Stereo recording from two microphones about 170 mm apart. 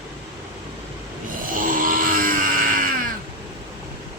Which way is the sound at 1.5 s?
55° right (ahead or behind).